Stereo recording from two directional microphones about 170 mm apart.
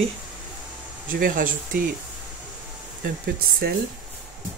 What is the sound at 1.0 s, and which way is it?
Speech, 55° right (ahead or behind).